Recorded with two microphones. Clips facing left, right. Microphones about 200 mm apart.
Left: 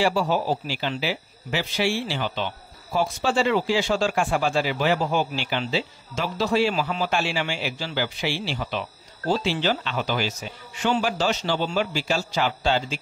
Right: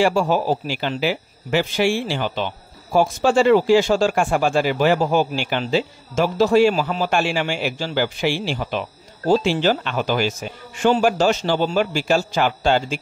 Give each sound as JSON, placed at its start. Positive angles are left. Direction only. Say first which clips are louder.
{"t": 0.0, "sound": "speech", "louder": "right 4 dB", "side_deg": -50}